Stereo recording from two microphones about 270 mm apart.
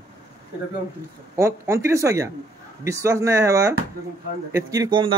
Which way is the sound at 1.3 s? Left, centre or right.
Centre.